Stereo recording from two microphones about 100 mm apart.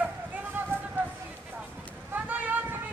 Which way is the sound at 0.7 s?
20° right (ahead or behind).